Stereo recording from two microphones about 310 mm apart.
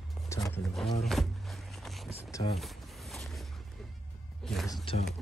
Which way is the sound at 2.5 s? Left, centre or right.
Centre.